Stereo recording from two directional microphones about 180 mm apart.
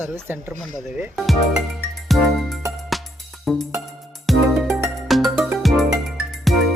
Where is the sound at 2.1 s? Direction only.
Centre (ahead or behind).